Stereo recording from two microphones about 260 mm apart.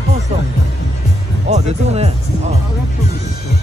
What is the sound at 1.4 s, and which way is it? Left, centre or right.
Speech, right.